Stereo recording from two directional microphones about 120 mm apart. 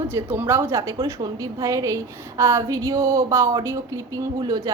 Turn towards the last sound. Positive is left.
turn(degrees=-35)  # may be behind; listen again after turning